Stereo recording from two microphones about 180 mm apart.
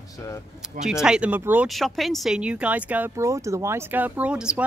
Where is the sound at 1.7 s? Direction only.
Centre (ahead or behind).